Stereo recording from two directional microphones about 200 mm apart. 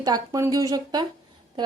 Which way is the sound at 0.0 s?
20° right (ahead or behind).